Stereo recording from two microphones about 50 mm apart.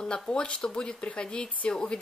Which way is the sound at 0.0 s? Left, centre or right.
Centre.